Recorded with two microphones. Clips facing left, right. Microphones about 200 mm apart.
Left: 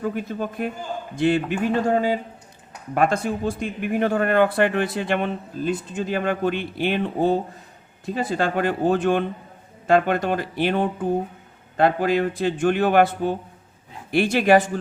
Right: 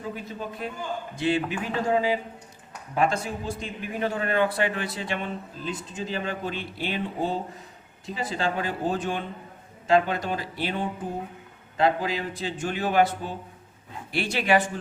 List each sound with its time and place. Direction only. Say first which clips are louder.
0.0 s a man's voice: left 8 dB; 55° left (ahead or behind)